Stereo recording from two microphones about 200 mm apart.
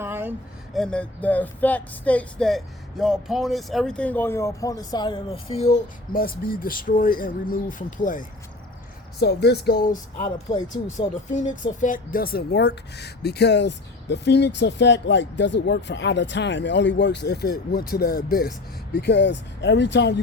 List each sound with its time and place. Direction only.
0.0 s a sound: 10° right (ahead or behind)
0.7 s speech: 5° left (ahead or behind); by 8.3 s 40° left (ahead or behind)
9.1 s speech: 55° left (ahead or behind)
18.9 s speech: 60° left (ahead or behind)